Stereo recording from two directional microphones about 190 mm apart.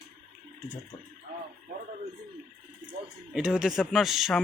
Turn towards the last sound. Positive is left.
turn(degrees=0)  # may be behind; listen again after turning